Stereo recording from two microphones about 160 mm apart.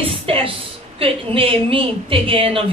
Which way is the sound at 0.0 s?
35° right (ahead or behind).